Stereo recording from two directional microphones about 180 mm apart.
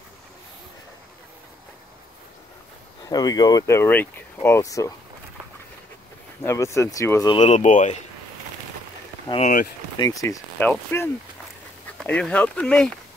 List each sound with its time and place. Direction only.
3.1 s speech: 20° left (ahead or behind)
6.4 s speech: 15° left (ahead or behind)
7.5 s speech: 40° left (ahead or behind)
9.9 s speech: 20° left (ahead or behind)